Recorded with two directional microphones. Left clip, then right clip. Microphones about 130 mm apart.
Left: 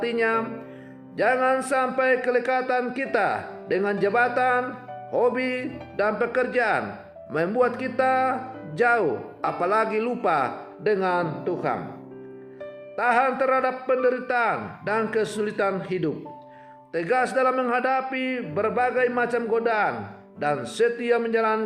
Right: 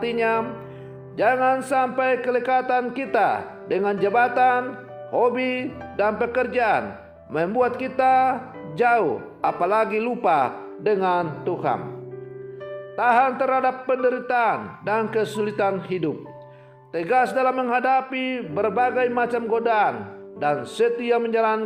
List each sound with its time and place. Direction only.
0.0 s a man's voice: 30° right (ahead or behind)
13.0 s a man's voice: 30° right (ahead or behind)